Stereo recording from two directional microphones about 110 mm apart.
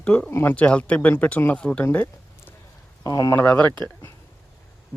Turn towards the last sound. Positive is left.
turn(degrees=20)  # may be behind; listen again after turning